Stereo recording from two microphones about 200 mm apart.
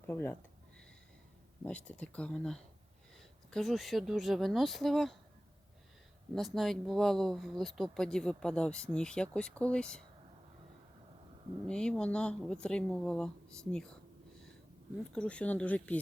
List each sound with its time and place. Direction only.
0.1 s speech: 10° left (ahead or behind)
1.6 s speech: 5° left (ahead or behind)
6.3 s speech: centre (ahead or behind)
11.6 s speech: 5° left (ahead or behind)
15.1 s speech: 5° left (ahead or behind)